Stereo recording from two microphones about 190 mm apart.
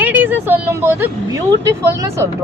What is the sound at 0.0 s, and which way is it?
A woman's voice, 10° right (ahead or behind).